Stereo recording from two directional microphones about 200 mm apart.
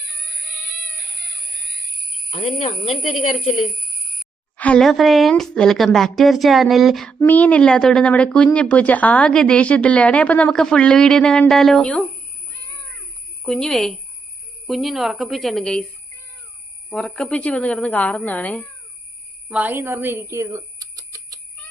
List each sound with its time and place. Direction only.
2.3 s speech: 30° left (ahead or behind)
4.2 s a woman's voice: 5° left (ahead or behind)
13.4 s a woman's voice: 5° left (ahead or behind)
16.9 s speech: 5° left (ahead or behind)
19.5 s speech: 10° right (ahead or behind)